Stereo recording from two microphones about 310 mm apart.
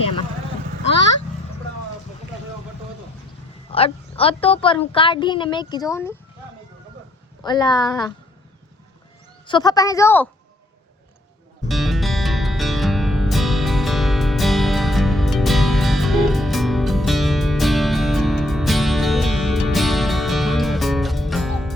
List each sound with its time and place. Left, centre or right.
3.7 s a woman's voice: centre
7.4 s a woman's voice: centre
9.5 s a woman's voice: centre
11.7 s music: centre